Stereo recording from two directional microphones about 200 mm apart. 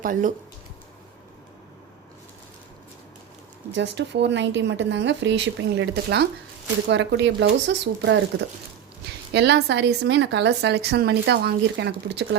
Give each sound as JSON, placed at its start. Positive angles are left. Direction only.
{"t": 0.0, "sound": "speech", "side_deg": -40}
{"t": 3.8, "sound": "a woman's voice", "side_deg": -60}
{"t": 9.3, "sound": "a woman's voice", "side_deg": -55}